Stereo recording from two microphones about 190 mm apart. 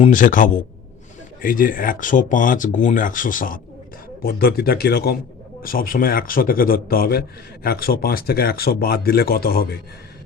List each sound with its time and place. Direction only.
0.0 s a man's voice: 45° left (ahead or behind)